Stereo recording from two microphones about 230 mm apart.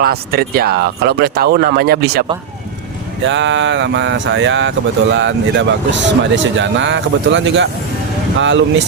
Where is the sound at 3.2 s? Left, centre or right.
Right.